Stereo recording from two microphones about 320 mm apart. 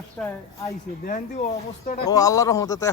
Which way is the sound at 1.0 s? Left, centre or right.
Left.